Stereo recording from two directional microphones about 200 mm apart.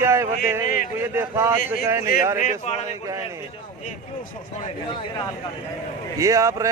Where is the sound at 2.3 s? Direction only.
40° left (ahead or behind).